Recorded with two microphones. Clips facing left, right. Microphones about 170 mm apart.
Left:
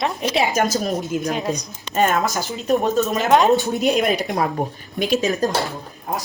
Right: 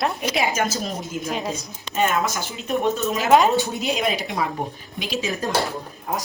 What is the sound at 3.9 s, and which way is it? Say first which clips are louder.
Speech: left 4 dB; 50° left (ahead or behind).